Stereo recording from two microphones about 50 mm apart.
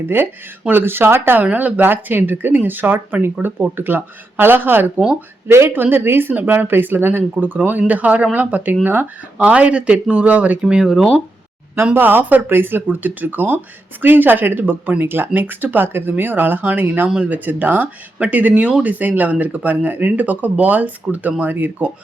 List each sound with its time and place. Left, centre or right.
0.2 s speech: right
1.5 s speech: right
5.5 s speech: right
5.7 s speech: right
9.4 s speech: right
11.9 s speech: right